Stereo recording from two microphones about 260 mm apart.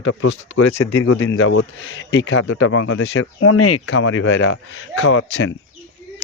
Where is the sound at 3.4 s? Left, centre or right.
Left.